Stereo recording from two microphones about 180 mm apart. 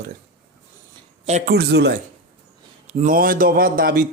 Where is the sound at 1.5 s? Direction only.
65° right (ahead or behind).